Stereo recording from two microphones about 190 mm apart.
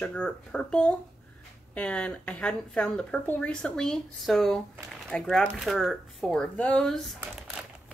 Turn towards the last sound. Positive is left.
turn(degrees=5)  # may be behind; listen again after turning